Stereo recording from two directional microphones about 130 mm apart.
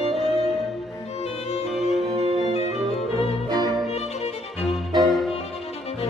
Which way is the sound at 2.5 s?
55° left (ahead or behind).